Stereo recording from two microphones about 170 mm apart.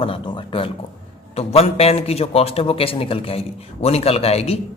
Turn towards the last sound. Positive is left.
turn(degrees=35)  # may be behind; listen again after turning